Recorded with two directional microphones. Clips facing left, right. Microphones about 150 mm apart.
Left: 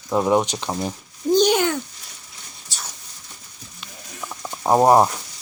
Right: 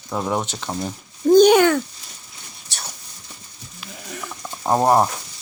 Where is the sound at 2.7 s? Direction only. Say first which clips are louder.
Even; 65° right (ahead or behind).